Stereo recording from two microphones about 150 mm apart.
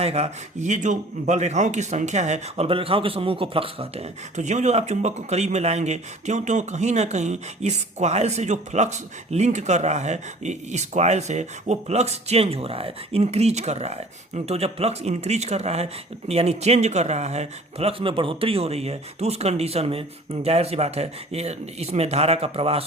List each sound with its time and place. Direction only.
0.0 s speech: 45° right (ahead or behind)